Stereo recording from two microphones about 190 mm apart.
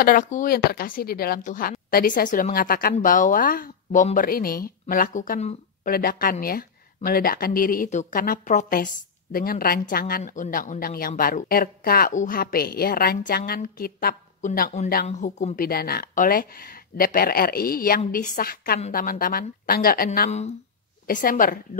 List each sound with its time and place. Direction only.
0.0 s speech: 45° left (ahead or behind)
20.2 s speech: 35° left (ahead or behind)
21.1 s speech: 45° left (ahead or behind)